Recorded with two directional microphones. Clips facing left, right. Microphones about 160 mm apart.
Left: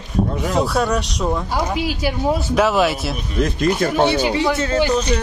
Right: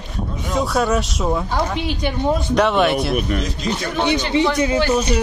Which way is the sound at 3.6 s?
50° left (ahead or behind).